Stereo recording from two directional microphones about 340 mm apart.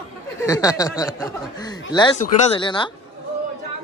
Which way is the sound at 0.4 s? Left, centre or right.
Centre.